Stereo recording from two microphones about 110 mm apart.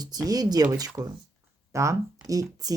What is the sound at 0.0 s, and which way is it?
Speech, 35° right (ahead or behind).